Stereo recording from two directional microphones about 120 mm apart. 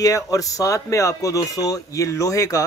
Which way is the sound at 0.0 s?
30° left (ahead or behind).